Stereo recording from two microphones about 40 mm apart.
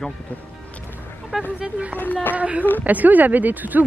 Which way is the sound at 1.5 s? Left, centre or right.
Right.